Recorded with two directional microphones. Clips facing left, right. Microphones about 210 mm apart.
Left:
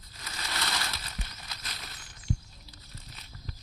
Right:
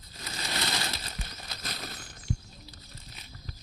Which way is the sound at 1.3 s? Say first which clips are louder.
Right 5 dB; 40° right (ahead or behind).